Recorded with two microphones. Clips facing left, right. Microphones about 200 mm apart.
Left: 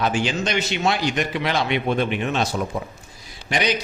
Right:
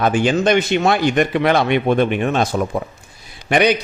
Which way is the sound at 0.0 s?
55° right (ahead or behind).